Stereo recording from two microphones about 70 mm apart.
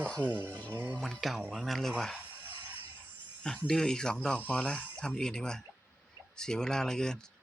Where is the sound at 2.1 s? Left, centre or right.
Right.